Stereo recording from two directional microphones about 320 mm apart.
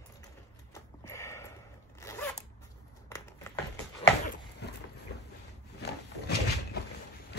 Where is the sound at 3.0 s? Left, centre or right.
Centre.